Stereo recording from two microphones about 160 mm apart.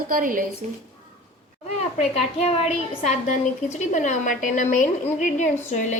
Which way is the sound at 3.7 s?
50° left (ahead or behind).